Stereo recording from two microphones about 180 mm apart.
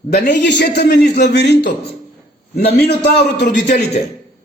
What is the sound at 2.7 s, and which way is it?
A man's voice, 65° left (ahead or behind).